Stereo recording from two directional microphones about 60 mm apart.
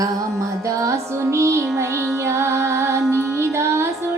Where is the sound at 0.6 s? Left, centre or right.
Right.